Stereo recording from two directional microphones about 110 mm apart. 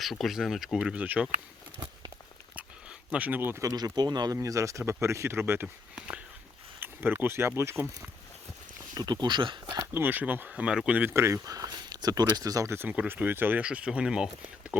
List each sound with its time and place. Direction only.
0.0 s speech: centre (ahead or behind)
3.1 s speech: 15° right (ahead or behind)
3.7 s speech: 35° right (ahead or behind)
9.0 s speech: 40° right (ahead or behind)
9.9 s speech: 15° right (ahead or behind)